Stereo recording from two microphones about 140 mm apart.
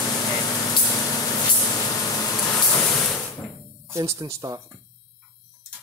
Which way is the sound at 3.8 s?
20° right (ahead or behind).